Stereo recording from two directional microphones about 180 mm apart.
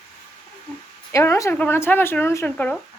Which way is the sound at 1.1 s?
15° left (ahead or behind).